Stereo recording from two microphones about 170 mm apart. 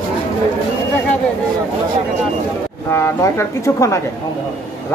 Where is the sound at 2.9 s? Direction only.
15° left (ahead or behind).